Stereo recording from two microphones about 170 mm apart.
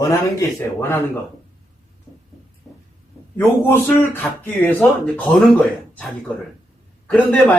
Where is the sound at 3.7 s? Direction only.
10° left (ahead or behind).